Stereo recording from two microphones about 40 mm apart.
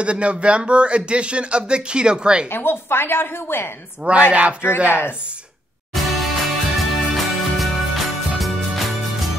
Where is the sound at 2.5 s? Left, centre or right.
Left.